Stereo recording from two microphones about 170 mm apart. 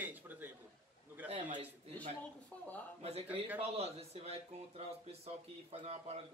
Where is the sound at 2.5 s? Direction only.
10° left (ahead or behind).